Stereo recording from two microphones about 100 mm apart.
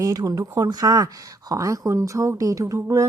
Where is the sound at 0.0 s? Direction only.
40° right (ahead or behind).